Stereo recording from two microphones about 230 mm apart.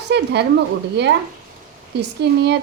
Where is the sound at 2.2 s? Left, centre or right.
Right.